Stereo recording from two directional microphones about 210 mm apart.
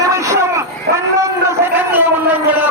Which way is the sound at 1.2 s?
10° right (ahead or behind).